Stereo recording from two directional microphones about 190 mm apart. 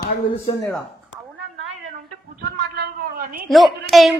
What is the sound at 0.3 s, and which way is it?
Speech, 25° left (ahead or behind).